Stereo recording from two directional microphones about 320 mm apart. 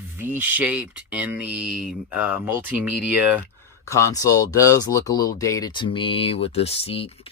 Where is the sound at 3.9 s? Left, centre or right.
Centre.